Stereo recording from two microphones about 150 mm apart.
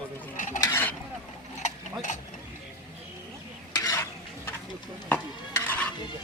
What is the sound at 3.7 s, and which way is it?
Stir, 25° left (ahead or behind).